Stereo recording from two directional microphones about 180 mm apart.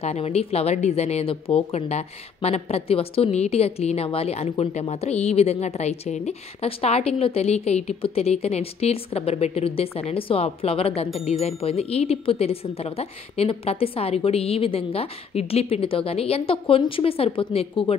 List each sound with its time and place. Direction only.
0.0 s speech: 35° left (ahead or behind)